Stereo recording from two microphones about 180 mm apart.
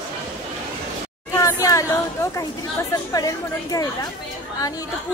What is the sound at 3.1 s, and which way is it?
Music, 20° left (ahead or behind).